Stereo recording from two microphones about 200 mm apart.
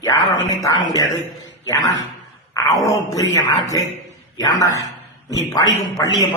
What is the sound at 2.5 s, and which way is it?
Speech, 15° left (ahead or behind).